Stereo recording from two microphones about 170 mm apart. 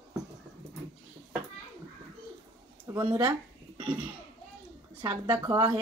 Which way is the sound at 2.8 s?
25° right (ahead or behind).